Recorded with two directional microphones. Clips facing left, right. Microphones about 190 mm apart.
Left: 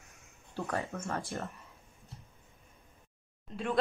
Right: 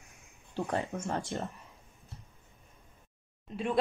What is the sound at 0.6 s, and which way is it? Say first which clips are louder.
Speech: right 3 dB; 20° right (ahead or behind).